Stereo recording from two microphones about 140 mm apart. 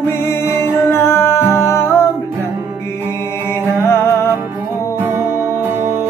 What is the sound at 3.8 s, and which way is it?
Music, 20° left (ahead or behind).